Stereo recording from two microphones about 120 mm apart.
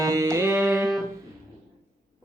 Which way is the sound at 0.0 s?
25° right (ahead or behind).